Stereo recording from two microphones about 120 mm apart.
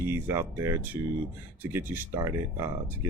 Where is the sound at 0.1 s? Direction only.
20° right (ahead or behind).